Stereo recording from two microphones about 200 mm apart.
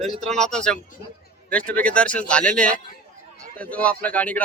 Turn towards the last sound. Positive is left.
turn(degrees=10)  # may be behind; listen again after turning